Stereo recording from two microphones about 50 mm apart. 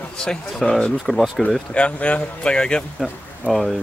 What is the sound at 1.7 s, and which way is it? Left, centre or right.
Speech, left.